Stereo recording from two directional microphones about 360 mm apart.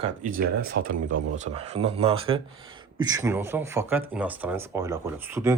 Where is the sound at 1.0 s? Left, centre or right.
Right.